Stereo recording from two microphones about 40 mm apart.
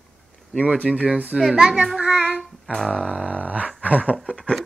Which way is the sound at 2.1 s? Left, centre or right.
Left.